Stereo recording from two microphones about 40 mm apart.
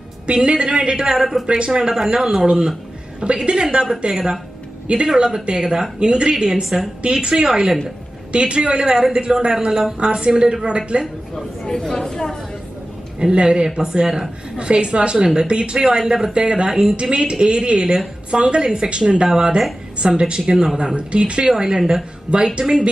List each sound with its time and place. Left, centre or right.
0.3 s speech: right
1.1 s speech: centre
3.2 s speech: right
4.1 s speech: centre
4.8 s speech: right
7.0 s speech: right
9.9 s speech: right
11.3 s speech: centre
13.2 s speech: right
14.0 s speech: centre
14.6 s speech: right
15.8 s speech: centre
20.8 s speech: right